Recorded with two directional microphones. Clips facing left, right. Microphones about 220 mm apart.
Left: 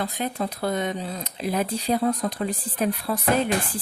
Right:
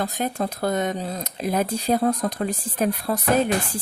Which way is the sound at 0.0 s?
45° right (ahead or behind).